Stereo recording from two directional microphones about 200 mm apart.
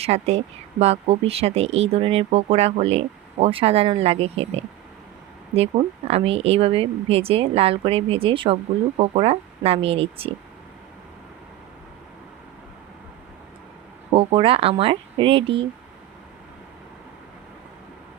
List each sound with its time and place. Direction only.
0.0 s speech: 30° right (ahead or behind)
14.1 s speech: 30° right (ahead or behind)